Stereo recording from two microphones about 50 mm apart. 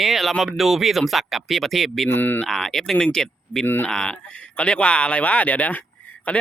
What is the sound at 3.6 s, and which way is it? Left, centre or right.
Speech, left.